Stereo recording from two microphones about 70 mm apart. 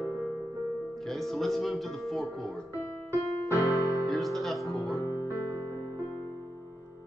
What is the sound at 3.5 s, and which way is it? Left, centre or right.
Piano, left.